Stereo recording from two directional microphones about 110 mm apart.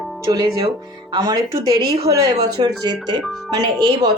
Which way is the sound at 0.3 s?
35° right (ahead or behind).